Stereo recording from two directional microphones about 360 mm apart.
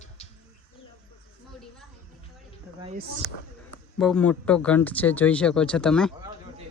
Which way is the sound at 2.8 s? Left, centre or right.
Centre.